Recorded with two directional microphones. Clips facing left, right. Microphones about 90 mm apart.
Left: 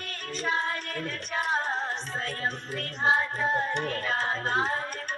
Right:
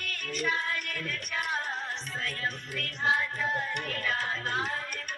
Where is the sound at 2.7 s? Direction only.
30° left (ahead or behind).